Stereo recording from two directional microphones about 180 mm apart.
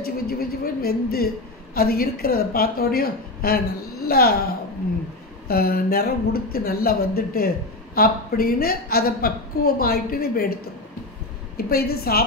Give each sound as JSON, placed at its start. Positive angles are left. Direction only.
{"t": 0.0, "sound": "speech", "side_deg": 55}
{"t": 5.5, "sound": "speech", "side_deg": 60}